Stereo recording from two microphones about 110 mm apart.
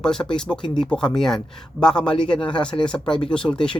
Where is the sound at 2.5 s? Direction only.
10° left (ahead or behind).